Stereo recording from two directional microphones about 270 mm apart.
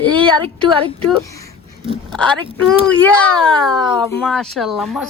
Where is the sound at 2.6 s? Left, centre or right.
Centre.